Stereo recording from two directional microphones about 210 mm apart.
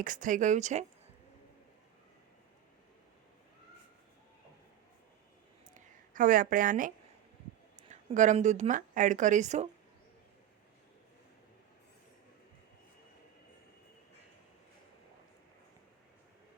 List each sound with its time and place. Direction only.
0.0 s speech: 40° right (ahead or behind)
5.7 s speech: 40° right (ahead or behind)